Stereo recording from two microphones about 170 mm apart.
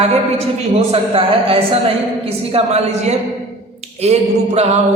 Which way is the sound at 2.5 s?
40° right (ahead or behind).